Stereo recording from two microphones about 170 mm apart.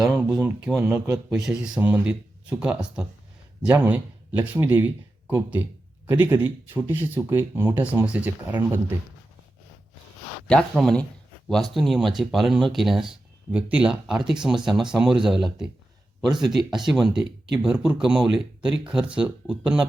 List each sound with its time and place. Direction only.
0.0 s speech: 5° right (ahead or behind)
1.3 s speech: 5° right (ahead or behind)
10.5 s speech: centre (ahead or behind)